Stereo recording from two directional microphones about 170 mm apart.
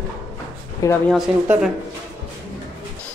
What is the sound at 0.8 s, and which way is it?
Speech, 20° left (ahead or behind).